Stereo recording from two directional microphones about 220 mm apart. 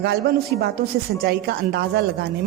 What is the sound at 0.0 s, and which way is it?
A woman's voice, 50° right (ahead or behind).